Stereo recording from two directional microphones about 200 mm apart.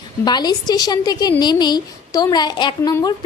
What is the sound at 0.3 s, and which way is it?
A woman's voice, 20° left (ahead or behind).